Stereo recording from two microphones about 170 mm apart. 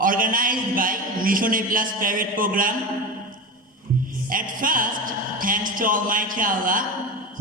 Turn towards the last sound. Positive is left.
turn(degrees=-55)  # may be behind; listen again after turning